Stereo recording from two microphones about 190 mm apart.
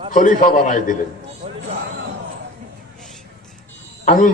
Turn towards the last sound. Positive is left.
turn(degrees=45)  # may be behind; listen again after turning